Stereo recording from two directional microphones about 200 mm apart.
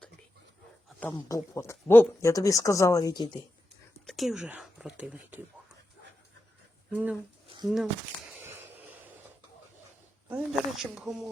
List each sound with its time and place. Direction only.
1.1 s speech: 15° left (ahead or behind)
4.0 s speech: centre (ahead or behind)
6.9 s speech: 5° right (ahead or behind)
8.3 s a sound: 10° right (ahead or behind)
10.2 s speech: 5° right (ahead or behind)